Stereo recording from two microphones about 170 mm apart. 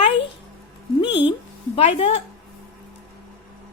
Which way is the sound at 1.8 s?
35° left (ahead or behind).